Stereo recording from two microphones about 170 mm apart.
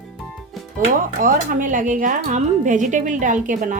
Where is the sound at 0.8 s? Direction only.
50° right (ahead or behind).